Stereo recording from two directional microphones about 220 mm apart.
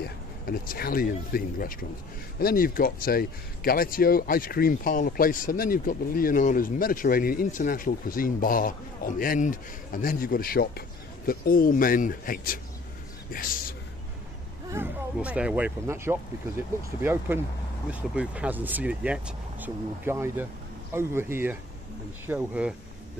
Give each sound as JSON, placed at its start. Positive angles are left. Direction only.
{"t": 0.0, "sound": "speech", "side_deg": 45}
{"t": 14.7, "sound": "speech", "side_deg": -10}